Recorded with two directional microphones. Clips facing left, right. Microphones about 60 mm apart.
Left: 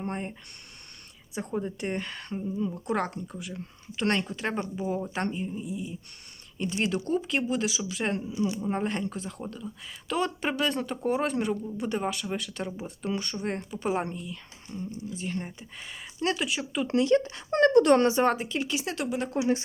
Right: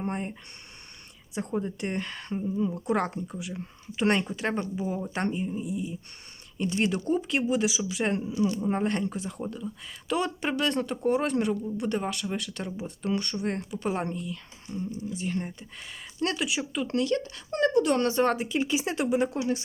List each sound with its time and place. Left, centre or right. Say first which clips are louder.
0.0 s speech: right 2 dB; centre
16.8 s speech: left 5 dB; left
17.5 s speech: left 4 dB; left
18.2 s speech: even; centre
18.6 s speech: right 3 dB; centre